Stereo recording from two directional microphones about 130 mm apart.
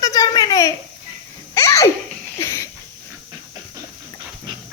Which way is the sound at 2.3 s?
20° left (ahead or behind).